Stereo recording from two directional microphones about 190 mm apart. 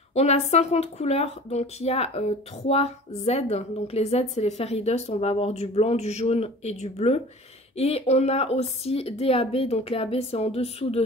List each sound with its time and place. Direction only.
0.1 s speech: 35° left (ahead or behind)